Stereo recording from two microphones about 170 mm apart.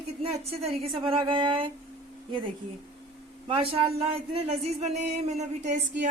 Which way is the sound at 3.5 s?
35° right (ahead or behind).